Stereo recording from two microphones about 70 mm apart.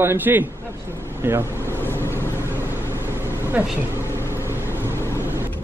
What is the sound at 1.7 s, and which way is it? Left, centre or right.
Vehicle, left.